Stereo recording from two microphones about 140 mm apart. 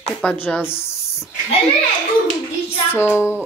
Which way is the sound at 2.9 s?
15° left (ahead or behind).